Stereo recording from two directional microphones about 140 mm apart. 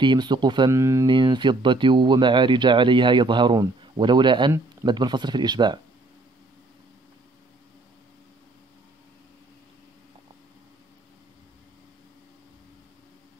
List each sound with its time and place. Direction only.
0.0 s speech: 35° right (ahead or behind)
0.7 s speech: 20° right (ahead or behind)
1.0 s speech: 35° right (ahead or behind)